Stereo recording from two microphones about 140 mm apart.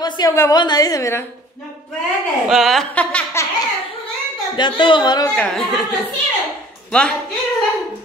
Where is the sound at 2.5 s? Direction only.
Centre (ahead or behind).